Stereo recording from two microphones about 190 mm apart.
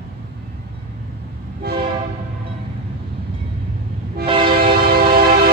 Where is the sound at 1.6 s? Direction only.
55° right (ahead or behind).